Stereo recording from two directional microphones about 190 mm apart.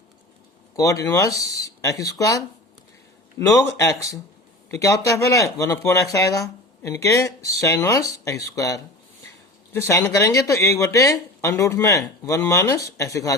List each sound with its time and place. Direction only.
0.8 s speech: 15° left (ahead or behind)